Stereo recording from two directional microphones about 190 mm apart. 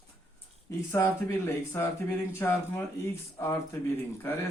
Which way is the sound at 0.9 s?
10° left (ahead or behind).